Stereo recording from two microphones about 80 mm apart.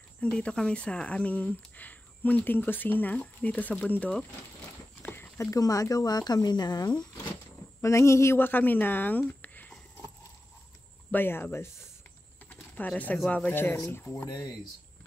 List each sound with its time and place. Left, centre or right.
0.2 s speech: centre
5.0 s a sound: left
5.4 s speech: left
7.8 s speech: left
9.4 s a sound: left
11.1 s speech: left
12.4 s a sound: centre
13.5 s speech: left
14.2 s speech: left